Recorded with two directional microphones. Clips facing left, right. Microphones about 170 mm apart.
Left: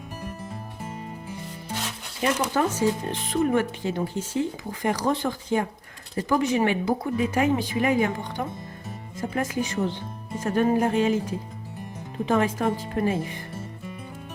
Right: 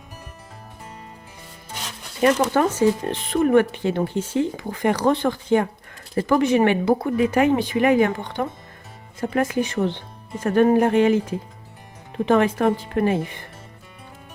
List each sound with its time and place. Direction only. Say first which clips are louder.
2.2 s speech: right 6 dB; 60° right (ahead or behind)